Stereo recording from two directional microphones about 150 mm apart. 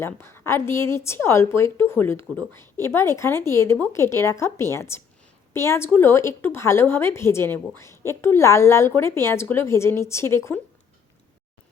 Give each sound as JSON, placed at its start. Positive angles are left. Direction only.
{"t": 0.0, "sound": "a woman's voice", "side_deg": 15}